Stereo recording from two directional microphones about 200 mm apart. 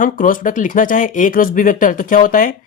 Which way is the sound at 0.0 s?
45° left (ahead or behind).